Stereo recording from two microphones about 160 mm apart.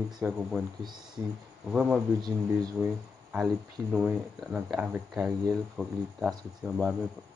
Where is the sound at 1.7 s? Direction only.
5° right (ahead or behind).